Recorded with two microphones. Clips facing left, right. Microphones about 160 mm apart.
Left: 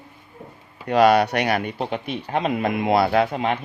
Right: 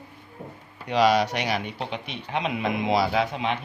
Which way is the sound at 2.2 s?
45° left (ahead or behind).